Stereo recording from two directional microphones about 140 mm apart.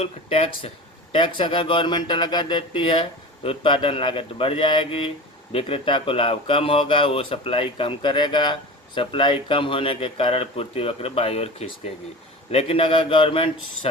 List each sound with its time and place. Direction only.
0.0 s speech: 45° left (ahead or behind)